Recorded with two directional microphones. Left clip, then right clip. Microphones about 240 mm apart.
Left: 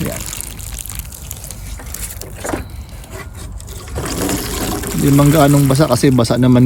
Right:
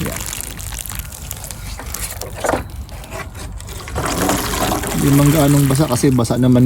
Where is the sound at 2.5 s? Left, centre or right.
Right.